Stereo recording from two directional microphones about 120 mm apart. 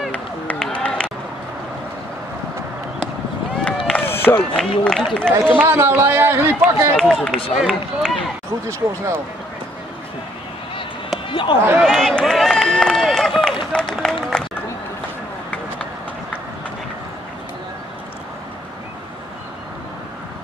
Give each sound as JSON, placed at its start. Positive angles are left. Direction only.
{"t": 0.1, "sound": "run", "side_deg": 10}
{"t": 3.6, "sound": "run", "side_deg": 10}
{"t": 4.6, "sound": "speech", "side_deg": 5}
{"t": 5.5, "sound": "speech", "side_deg": -15}
{"t": 7.0, "sound": "speech", "side_deg": 0}
{"t": 8.6, "sound": "speech", "side_deg": -20}
{"t": 11.2, "sound": "basketball bounce", "side_deg": 40}
{"t": 11.8, "sound": "run", "side_deg": 5}